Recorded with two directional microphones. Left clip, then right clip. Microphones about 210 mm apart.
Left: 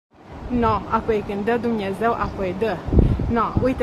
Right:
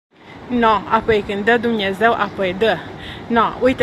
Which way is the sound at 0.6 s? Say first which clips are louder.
Right 6 dB; 10° right (ahead or behind).